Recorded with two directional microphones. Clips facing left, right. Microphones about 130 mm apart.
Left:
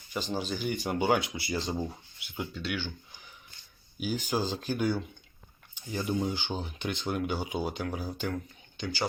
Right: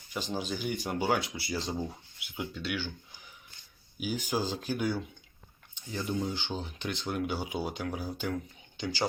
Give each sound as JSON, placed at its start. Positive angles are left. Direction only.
{"t": 0.1, "sound": "speech", "side_deg": 0}
{"t": 4.0, "sound": "speech", "side_deg": -5}
{"t": 5.7, "sound": "drip", "side_deg": 0}
{"t": 6.2, "sound": "speech", "side_deg": 5}
{"t": 8.8, "sound": "speech", "side_deg": -25}